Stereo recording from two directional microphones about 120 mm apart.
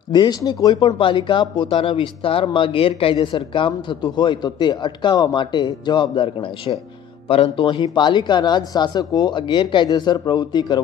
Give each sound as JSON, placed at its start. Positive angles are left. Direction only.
{"t": 0.1, "sound": "speech", "side_deg": 35}